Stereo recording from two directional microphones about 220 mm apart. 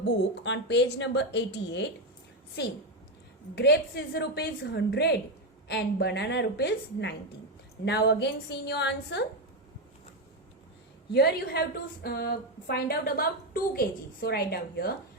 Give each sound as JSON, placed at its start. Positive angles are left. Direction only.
{"t": 0.0, "sound": "a woman's voice", "side_deg": 55}
{"t": 11.1, "sound": "a woman's voice", "side_deg": 45}